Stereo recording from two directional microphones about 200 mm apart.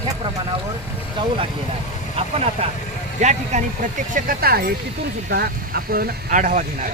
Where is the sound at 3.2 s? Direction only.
35° right (ahead or behind).